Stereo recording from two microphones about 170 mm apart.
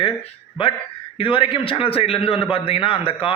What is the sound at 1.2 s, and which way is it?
A man's voice, 30° left (ahead or behind).